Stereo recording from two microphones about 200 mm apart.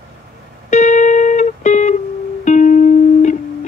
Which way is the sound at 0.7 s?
35° left (ahead or behind).